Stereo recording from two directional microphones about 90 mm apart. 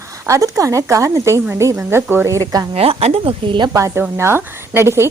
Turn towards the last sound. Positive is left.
turn(degrees=-30)  # may be behind; listen again after turning